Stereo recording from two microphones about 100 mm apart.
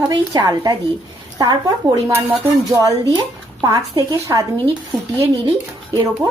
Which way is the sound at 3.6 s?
45° right (ahead or behind).